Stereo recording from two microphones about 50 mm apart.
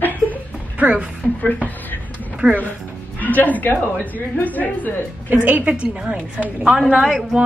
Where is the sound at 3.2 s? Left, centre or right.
Left.